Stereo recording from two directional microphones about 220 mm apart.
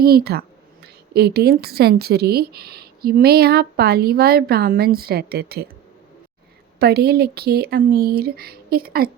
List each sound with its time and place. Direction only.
0.0 s a woman's voice: 45° right (ahead or behind)
6.7 s a woman's voice: 45° right (ahead or behind)